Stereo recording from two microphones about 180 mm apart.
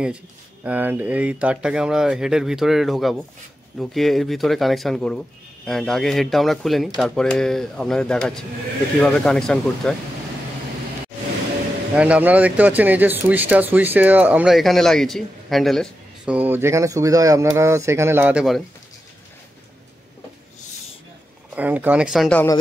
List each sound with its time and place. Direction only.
0.7 s speech: 10° right (ahead or behind)
11.9 s speech: 5° right (ahead or behind)
21.5 s speech: 10° right (ahead or behind)